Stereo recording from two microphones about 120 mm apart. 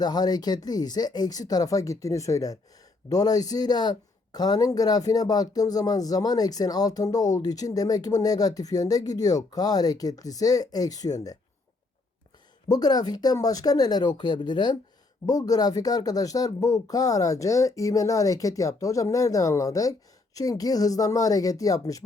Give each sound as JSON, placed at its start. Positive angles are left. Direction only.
{"t": 0.0, "sound": "speech", "side_deg": 35}
{"t": 12.6, "sound": "speech", "side_deg": 35}